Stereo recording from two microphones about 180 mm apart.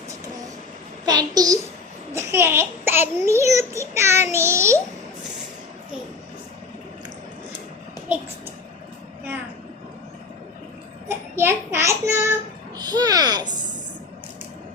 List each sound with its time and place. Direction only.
1.0 s a child's voice: 20° right (ahead or behind)
8.1 s a child's voice: 5° right (ahead or behind)
11.1 s a child's voice: 15° right (ahead or behind)